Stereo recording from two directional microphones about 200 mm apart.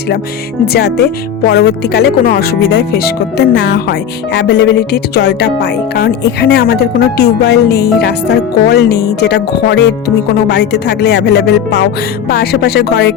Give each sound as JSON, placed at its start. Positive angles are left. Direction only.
{"t": 0.6, "sound": "speech", "side_deg": 55}